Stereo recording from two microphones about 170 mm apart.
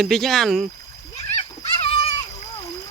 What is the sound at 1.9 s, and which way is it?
Splash, 35° left (ahead or behind).